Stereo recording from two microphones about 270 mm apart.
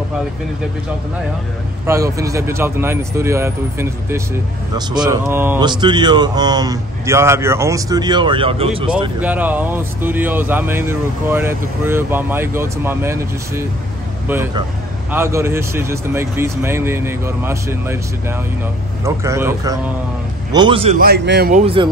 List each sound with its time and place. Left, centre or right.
1.9 s speech: centre
9.2 s speech: centre
19.0 s a man's voice: centre
21.0 s speech: right